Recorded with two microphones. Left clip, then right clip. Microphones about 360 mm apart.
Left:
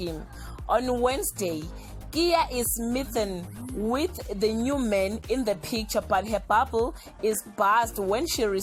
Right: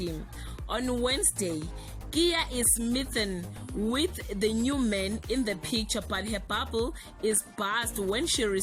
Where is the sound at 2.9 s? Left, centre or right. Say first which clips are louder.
Left 6 dB; left.